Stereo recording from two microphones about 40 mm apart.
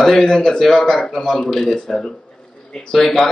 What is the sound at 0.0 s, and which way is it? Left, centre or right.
Speech, centre.